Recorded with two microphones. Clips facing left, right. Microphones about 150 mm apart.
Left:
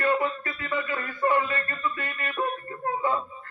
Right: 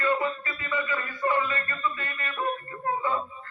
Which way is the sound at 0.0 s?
60° left (ahead or behind).